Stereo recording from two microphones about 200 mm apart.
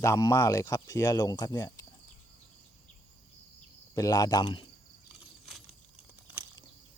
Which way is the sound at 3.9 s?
15° left (ahead or behind).